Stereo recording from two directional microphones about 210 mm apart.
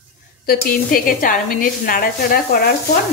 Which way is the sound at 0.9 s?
40° left (ahead or behind).